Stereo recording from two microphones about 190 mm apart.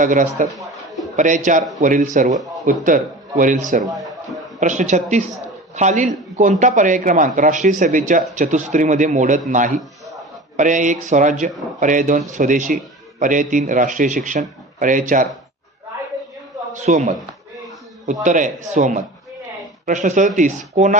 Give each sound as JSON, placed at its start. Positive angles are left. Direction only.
{"t": 0.0, "sound": "a man's voice", "side_deg": -45}
{"t": 16.7, "sound": "a man's voice", "side_deg": -40}